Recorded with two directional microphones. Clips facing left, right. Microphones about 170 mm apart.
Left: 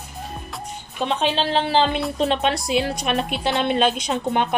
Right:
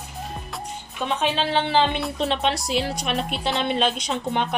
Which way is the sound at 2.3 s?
55° left (ahead or behind).